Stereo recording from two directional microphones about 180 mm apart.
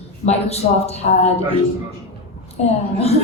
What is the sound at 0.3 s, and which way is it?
A man's voice, 35° left (ahead or behind).